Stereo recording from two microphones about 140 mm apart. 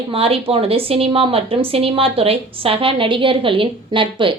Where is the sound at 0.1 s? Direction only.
45° right (ahead or behind).